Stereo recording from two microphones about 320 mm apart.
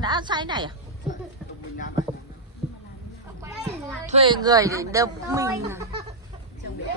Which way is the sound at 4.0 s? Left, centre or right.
Centre.